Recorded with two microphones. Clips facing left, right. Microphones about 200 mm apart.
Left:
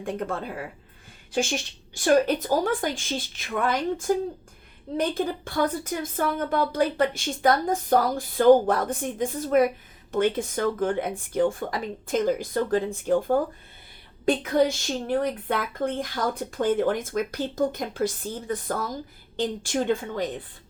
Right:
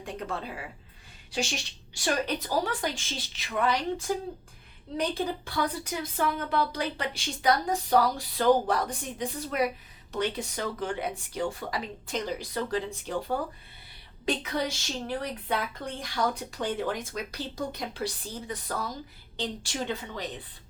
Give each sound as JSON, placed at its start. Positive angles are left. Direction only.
{"t": 0.0, "sound": "a woman's voice", "side_deg": 50}